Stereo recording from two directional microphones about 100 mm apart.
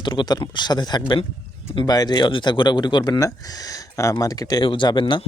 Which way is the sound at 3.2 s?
35° left (ahead or behind).